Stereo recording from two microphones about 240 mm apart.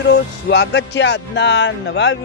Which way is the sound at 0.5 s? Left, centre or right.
Left.